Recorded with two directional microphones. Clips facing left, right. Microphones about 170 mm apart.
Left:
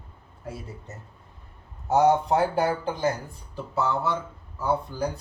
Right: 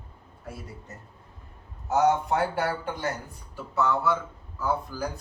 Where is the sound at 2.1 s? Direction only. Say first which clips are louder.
Left 3 dB; 35° left (ahead or behind).